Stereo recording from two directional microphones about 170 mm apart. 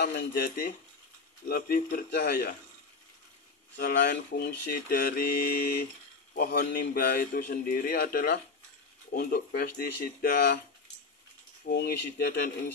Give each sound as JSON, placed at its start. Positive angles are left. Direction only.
{"t": 0.0, "sound": "speech", "side_deg": 65}
{"t": 3.9, "sound": "speech", "side_deg": 75}
{"t": 11.6, "sound": "speech", "side_deg": 70}